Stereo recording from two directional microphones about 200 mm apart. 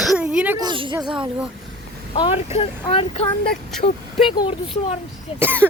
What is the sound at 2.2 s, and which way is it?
Speech, 30° left (ahead or behind).